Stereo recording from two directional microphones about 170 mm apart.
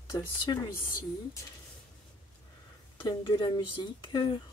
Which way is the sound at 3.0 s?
25° left (ahead or behind).